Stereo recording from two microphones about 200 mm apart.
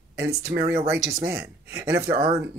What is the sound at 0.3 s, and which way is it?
Speech, 50° right (ahead or behind).